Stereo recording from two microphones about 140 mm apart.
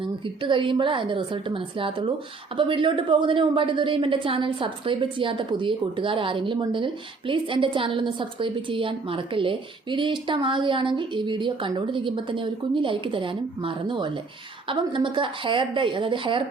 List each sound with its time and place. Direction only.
0.0 s a woman's voice: 35° right (ahead or behind)